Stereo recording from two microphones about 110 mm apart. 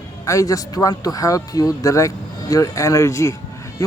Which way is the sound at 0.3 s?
30° left (ahead or behind).